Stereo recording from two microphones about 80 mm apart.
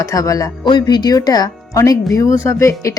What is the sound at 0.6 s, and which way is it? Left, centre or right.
Speech, left.